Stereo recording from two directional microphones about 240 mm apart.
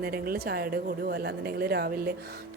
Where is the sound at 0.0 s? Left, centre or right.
Right.